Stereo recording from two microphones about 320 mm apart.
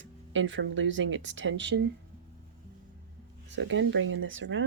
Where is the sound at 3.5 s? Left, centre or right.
Right.